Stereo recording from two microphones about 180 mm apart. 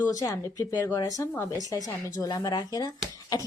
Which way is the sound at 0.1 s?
20° left (ahead or behind).